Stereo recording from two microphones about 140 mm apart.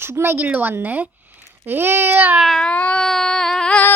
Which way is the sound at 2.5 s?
5° left (ahead or behind).